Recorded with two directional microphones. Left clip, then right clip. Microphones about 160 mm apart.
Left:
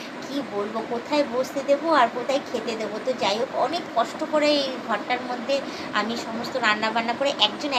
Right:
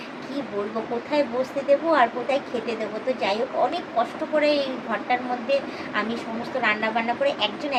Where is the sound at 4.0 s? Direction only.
15° right (ahead or behind).